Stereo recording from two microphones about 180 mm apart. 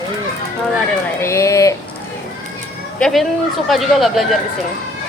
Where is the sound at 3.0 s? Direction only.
Centre (ahead or behind).